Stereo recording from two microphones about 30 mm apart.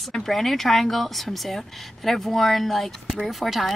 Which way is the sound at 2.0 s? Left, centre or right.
Centre.